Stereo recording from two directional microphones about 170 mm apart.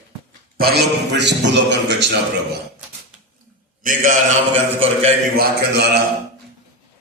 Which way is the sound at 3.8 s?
50° right (ahead or behind).